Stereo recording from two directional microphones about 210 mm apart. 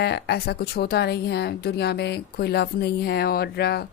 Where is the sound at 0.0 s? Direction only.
50° left (ahead or behind).